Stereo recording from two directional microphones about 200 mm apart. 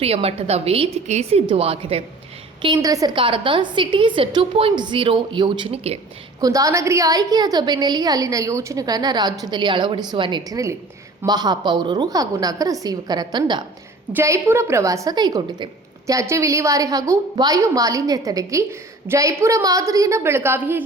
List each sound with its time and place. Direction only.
0.0 s a woman's voice: 30° right (ahead or behind)
6.4 s a woman's voice: 15° right (ahead or behind)